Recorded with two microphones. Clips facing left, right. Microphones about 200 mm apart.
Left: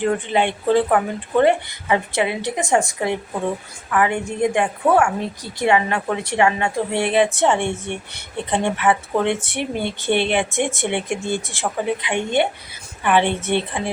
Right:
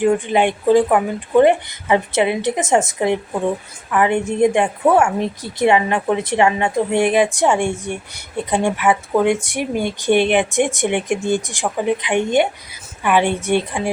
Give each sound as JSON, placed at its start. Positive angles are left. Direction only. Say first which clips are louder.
{"t": 0.0, "sound": "a woman's voice", "louder": "right 4 dB", "side_deg": -15}
{"t": 13.1, "sound": "speech", "louder": "right 2 dB", "side_deg": -10}